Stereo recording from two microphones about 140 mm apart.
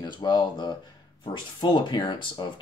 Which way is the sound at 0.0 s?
30° left (ahead or behind).